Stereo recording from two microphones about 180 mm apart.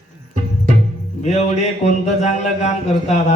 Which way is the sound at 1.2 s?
40° left (ahead or behind).